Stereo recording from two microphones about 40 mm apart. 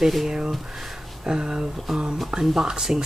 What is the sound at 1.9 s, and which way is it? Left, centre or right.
Speech, centre.